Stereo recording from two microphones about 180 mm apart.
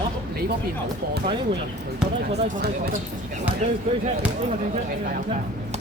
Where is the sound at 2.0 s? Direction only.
5° right (ahead or behind).